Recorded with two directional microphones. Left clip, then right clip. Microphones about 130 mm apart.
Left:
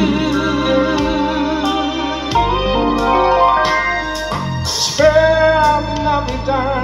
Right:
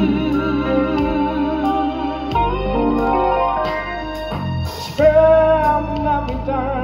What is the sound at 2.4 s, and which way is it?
Music, 20° left (ahead or behind).